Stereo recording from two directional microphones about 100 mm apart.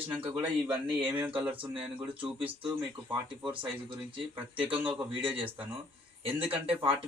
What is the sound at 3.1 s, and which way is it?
Speech, 55° right (ahead or behind).